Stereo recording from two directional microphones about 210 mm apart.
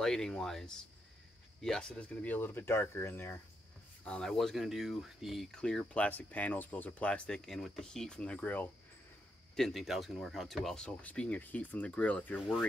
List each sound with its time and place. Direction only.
0.0 s speech: 5° left (ahead or behind)